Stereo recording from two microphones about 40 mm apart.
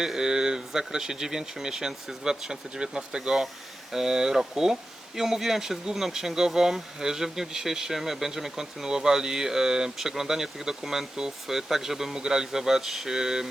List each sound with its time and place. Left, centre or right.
0.0 s speech: centre